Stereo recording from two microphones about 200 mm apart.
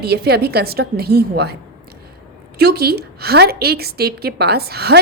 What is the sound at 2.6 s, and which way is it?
A woman's voice, 50° right (ahead or behind).